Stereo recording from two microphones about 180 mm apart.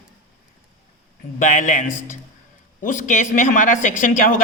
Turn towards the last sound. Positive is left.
turn(degrees=45)  # may be behind; listen again after turning